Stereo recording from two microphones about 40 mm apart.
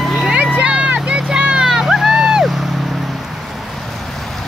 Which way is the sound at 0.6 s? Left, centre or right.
Right.